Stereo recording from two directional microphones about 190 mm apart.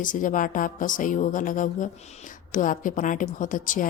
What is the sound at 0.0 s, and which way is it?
Speech, 45° left (ahead or behind).